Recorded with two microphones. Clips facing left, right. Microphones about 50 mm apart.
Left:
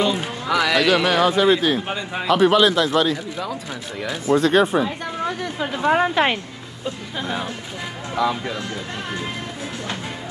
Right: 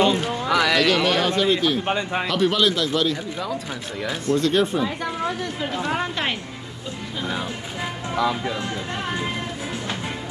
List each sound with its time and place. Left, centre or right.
0.2 s a man's voice: centre
1.9 s speech: centre
2.2 s a man's voice: centre
5.9 s a woman's voice: left
8.1 s a man's voice: centre